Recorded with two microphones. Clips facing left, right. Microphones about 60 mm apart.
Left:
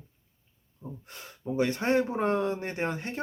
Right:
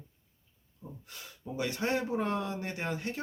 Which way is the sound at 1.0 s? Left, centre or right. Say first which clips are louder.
Left 8 dB; left.